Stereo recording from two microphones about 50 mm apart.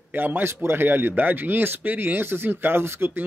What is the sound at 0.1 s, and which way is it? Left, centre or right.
Speech, right.